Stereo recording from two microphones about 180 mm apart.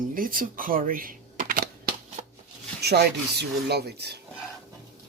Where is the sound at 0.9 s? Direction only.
50° right (ahead or behind).